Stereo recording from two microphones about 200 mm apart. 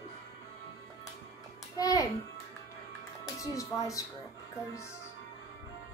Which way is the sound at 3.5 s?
15° left (ahead or behind).